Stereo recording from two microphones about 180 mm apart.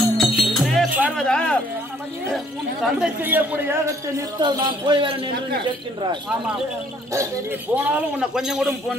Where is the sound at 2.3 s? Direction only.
5° right (ahead or behind).